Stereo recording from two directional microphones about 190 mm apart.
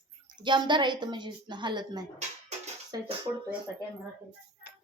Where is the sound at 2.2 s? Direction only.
35° right (ahead or behind).